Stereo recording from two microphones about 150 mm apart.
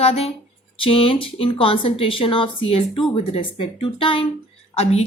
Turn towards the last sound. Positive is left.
turn(degrees=40)  # may be behind; listen again after turning